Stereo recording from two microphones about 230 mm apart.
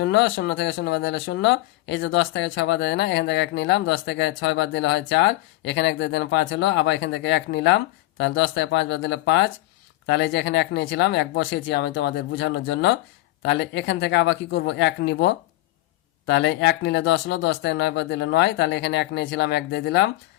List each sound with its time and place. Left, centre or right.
0.0 s speech: left